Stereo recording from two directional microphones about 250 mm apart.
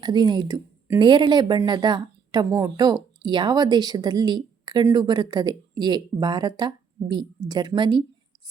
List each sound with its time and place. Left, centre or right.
0.0 s a woman's voice: centre